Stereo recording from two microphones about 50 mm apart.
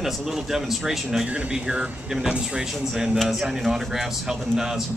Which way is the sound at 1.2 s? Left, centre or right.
Right.